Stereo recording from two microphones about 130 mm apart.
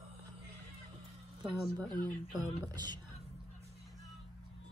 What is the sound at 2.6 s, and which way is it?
Speech, 35° right (ahead or behind).